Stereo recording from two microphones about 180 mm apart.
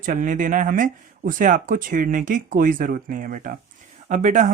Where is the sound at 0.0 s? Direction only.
45° right (ahead or behind).